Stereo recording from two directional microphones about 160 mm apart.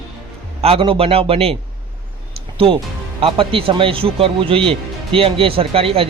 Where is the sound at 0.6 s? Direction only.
35° right (ahead or behind).